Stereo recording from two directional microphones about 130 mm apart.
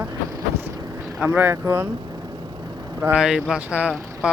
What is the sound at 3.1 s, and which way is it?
Speech, 5° right (ahead or behind).